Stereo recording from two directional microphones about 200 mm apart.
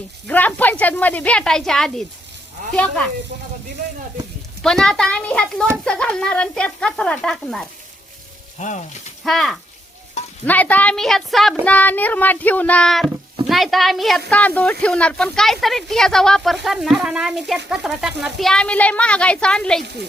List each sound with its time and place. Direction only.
0.3 s a woman's voice: 10° left (ahead or behind)
4.6 s speech: 5° left (ahead or behind)
8.5 s sizzle: 35° left (ahead or behind)
9.2 s a woman's voice: centre (ahead or behind)